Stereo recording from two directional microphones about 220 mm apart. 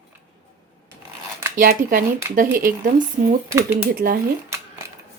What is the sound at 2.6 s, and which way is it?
Speech, 40° right (ahead or behind).